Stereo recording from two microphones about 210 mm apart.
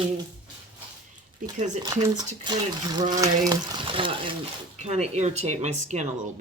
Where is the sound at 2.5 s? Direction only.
20° right (ahead or behind).